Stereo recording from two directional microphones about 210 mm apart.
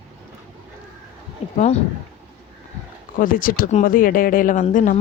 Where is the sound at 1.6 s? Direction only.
30° left (ahead or behind).